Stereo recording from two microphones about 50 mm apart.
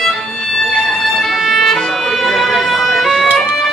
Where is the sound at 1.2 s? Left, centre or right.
Centre.